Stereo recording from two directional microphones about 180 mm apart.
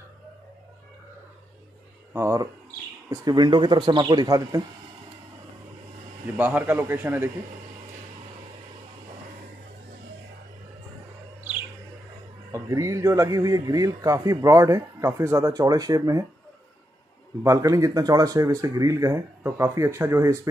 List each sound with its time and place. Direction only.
2.1 s a man's voice: 15° right (ahead or behind)
6.2 s speech: 10° right (ahead or behind)
12.4 s a man's voice: 20° right (ahead or behind)
17.4 s speech: 20° right (ahead or behind)